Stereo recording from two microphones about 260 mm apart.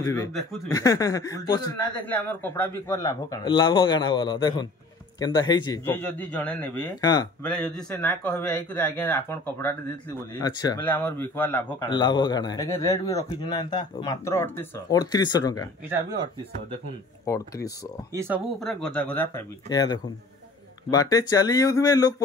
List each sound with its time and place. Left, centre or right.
0.0 s a man's voice: centre
7.4 s a man's voice: centre
15.9 s speech: centre
17.3 s a man's voice: centre
18.1 s a man's voice: centre